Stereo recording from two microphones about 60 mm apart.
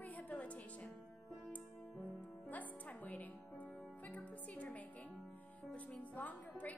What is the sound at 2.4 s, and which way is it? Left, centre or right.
Music, left.